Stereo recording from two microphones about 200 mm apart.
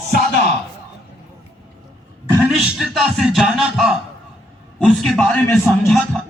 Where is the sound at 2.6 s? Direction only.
Centre (ahead or behind).